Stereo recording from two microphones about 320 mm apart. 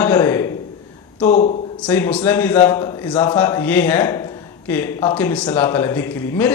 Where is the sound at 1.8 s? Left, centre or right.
Centre.